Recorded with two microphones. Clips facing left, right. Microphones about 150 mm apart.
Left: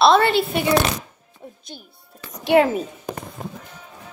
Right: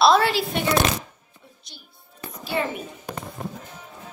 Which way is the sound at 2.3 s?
85° left.